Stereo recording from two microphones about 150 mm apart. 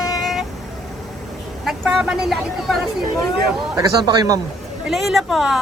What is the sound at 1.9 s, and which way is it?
Speech, 5° right (ahead or behind).